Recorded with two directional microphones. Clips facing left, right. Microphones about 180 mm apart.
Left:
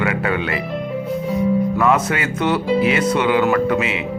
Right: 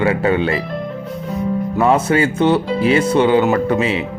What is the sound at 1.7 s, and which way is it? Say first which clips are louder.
A man's voice: right 3 dB; 30° right (ahead or behind).